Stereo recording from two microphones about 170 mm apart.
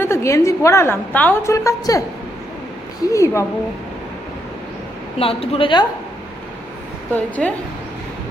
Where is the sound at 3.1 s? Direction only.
15° left (ahead or behind).